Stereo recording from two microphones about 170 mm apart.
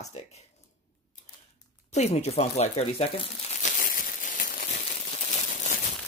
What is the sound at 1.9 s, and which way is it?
Speech, 40° left (ahead or behind).